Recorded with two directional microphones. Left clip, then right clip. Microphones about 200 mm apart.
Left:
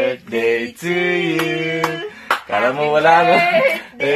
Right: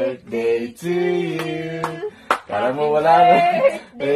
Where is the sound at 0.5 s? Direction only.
25° left (ahead or behind).